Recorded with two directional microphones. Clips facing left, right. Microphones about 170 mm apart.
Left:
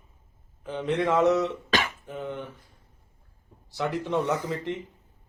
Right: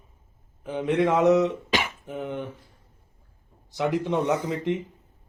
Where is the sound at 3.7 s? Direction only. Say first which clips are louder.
Right 3 dB; 15° right (ahead or behind).